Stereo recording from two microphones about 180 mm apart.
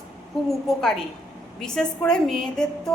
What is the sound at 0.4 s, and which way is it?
A woman's voice, 5° left (ahead or behind).